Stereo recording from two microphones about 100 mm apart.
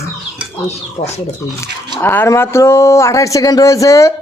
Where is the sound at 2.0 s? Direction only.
20° left (ahead or behind).